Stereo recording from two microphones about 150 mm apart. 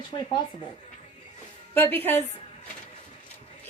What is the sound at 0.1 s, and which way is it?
Speech, 35° left (ahead or behind).